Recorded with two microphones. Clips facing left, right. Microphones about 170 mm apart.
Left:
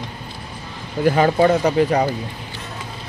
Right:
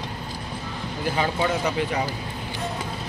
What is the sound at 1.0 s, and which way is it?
Speech, 55° left (ahead or behind).